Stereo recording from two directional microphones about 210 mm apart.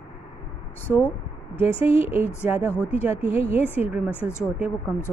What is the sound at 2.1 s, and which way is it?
Speech, 10° right (ahead or behind).